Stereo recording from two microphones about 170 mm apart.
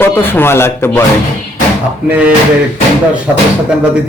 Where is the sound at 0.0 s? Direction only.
10° left (ahead or behind).